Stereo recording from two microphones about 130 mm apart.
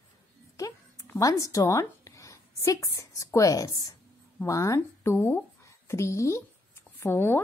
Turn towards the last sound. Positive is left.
turn(degrees=15)  # may be behind; listen again after turning